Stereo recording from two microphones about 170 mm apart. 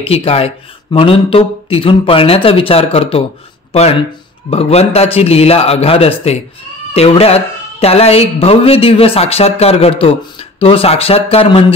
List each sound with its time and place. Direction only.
0.0 s speech: 35° left (ahead or behind)